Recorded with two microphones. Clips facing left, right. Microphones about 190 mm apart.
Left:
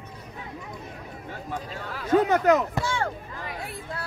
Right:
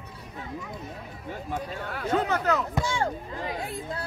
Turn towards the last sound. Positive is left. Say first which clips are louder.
# right 2 dB
turn(degrees=-20)  # may be behind; listen again after turning